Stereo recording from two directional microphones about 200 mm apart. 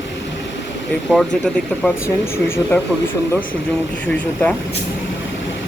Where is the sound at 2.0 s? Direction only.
10° left (ahead or behind).